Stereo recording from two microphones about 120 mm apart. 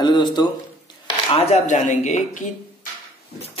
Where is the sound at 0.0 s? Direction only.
35° left (ahead or behind).